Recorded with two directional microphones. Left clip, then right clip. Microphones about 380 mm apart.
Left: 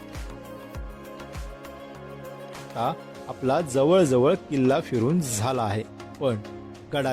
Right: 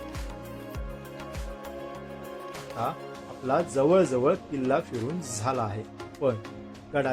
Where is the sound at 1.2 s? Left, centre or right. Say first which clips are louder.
Right 1 dB; centre.